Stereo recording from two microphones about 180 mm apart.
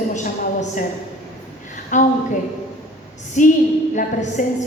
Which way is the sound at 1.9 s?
45° left (ahead or behind).